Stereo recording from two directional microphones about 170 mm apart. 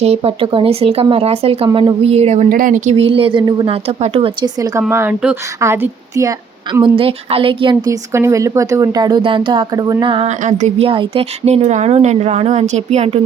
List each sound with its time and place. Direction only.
0.0 s a woman's voice: 35° right (ahead or behind)
2.5 s a woman's voice: 55° right (ahead or behind); by 6.3 s 15° right (ahead or behind)
6.8 s a woman's voice: 30° right (ahead or behind)